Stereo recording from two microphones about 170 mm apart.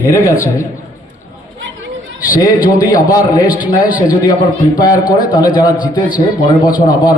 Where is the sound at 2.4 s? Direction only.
20° left (ahead or behind).